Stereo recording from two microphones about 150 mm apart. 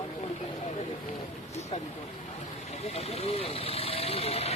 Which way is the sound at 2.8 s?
45° left (ahead or behind).